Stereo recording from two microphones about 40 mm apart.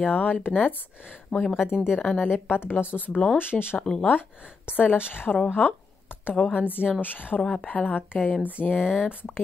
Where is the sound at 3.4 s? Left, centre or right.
Left.